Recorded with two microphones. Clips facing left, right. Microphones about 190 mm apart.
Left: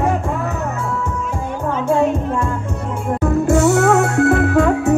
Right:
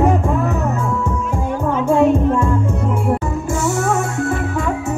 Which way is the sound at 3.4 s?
65° left (ahead or behind).